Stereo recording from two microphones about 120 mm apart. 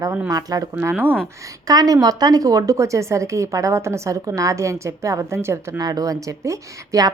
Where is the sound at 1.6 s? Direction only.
30° right (ahead or behind).